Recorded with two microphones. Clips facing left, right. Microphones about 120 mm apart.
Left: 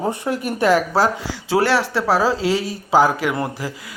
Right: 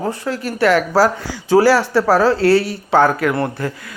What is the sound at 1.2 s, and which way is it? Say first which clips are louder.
A man's voice: right 6 dB; centre (ahead or behind).